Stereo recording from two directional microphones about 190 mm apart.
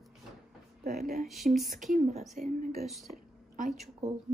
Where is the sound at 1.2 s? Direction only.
Centre (ahead or behind).